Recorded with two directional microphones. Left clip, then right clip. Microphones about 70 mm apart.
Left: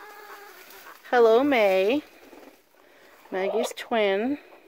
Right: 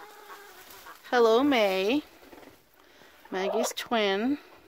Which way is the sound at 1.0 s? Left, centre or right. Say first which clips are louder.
Left 3 dB; centre.